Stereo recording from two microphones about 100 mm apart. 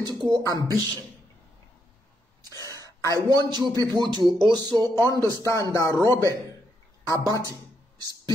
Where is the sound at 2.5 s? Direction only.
40° right (ahead or behind).